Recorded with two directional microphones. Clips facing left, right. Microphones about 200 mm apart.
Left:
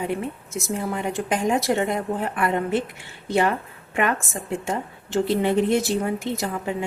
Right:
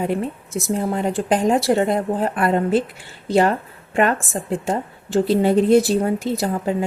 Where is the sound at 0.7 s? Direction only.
35° right (ahead or behind).